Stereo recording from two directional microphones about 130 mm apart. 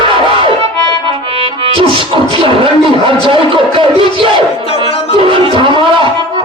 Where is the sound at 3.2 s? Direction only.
40° right (ahead or behind).